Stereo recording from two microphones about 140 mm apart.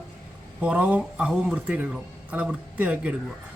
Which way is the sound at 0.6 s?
10° right (ahead or behind).